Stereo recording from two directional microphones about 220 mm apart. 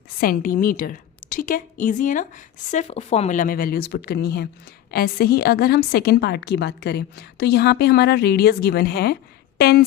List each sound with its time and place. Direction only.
0.2 s a woman's voice: 40° left (ahead or behind)